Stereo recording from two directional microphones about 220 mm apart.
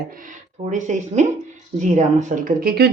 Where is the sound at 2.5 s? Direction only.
45° right (ahead or behind).